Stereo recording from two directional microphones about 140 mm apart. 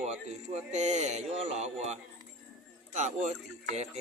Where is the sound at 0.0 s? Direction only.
55° right (ahead or behind).